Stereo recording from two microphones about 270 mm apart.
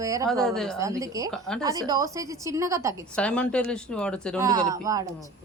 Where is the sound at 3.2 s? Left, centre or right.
Centre.